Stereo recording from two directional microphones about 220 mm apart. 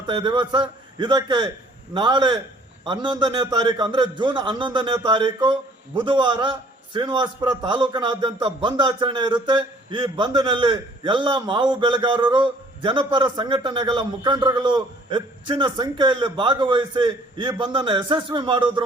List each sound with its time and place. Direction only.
0.0 s a man's voice: 20° right (ahead or behind)